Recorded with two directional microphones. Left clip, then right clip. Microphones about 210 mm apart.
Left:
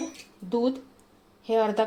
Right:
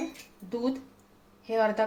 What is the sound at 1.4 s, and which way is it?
Speech, 35° left (ahead or behind).